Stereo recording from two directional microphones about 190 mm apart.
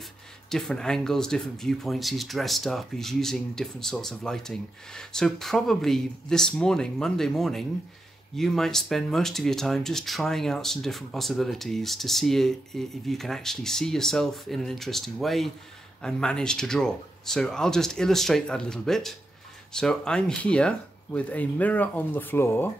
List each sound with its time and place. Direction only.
0.5 s speech: centre (ahead or behind)